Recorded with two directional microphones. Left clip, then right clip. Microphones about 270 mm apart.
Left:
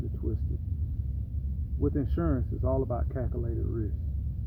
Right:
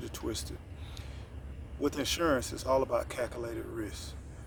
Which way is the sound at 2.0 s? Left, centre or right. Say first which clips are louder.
Right 3 dB; centre.